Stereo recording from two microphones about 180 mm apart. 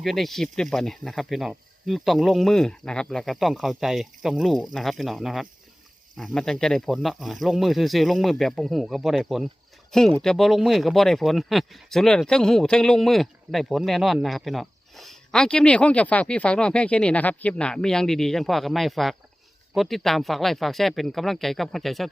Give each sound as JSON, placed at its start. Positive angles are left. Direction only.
{"t": 0.0, "sound": "speech", "side_deg": 0}